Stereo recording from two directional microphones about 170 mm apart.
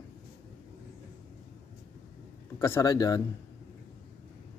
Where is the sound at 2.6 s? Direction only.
20° left (ahead or behind).